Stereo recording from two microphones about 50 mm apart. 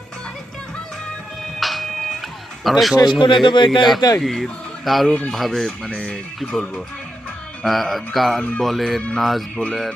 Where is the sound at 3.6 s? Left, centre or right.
Centre.